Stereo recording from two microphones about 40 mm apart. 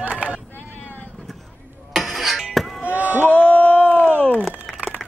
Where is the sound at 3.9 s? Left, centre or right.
Right.